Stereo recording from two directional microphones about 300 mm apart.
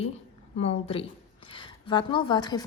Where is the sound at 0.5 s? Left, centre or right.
Centre.